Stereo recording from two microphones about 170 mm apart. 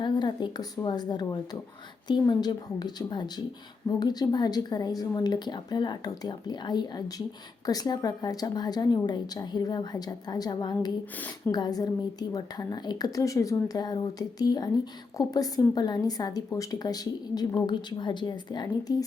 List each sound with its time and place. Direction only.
0.0 s a woman's voice: 25° left (ahead or behind)